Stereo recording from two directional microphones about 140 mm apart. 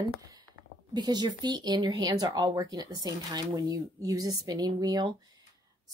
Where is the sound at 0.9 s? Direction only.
30° right (ahead or behind).